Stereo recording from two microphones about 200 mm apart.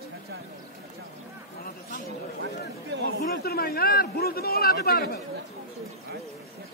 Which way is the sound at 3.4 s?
50° left (ahead or behind).